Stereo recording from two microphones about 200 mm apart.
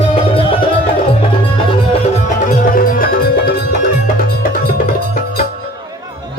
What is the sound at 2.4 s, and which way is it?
Music, 40° left (ahead or behind).